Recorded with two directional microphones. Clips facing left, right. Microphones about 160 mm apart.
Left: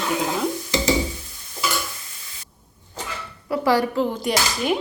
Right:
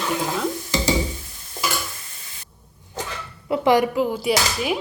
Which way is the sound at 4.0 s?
5° right (ahead or behind).